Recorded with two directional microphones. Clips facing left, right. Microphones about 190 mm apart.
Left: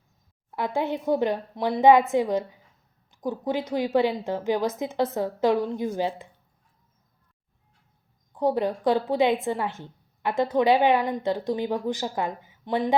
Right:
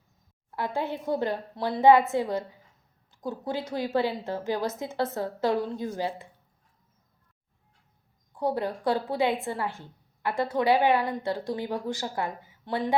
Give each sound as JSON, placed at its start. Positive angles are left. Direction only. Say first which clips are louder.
{"t": 0.5, "sound": "a woman's voice", "louder": "left 4 dB", "side_deg": 15}
{"t": 8.3, "sound": "a woman's voice", "louder": "left 4 dB", "side_deg": 20}